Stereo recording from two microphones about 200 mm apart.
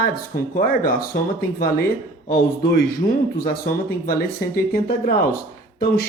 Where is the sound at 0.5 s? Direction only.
45° left (ahead or behind).